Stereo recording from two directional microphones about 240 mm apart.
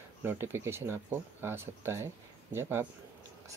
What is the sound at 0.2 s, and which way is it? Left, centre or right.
Speech, centre.